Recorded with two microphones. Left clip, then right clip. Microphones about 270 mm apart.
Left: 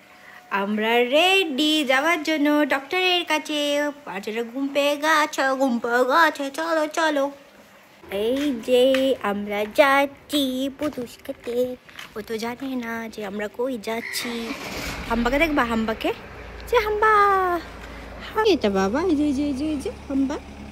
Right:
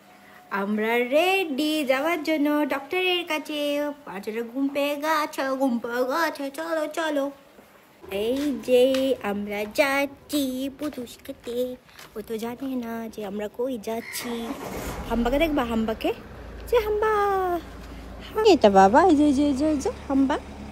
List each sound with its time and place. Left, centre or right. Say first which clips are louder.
0.5 s a woman's voice: left 3 dB; centre
13.6 s speech: left 2 dB; centre
13.8 s a woman's voice: left 3 dB; centre
18.7 s a woman's voice: right 7 dB; right
19.0 s a woman's voice: right 3 dB; centre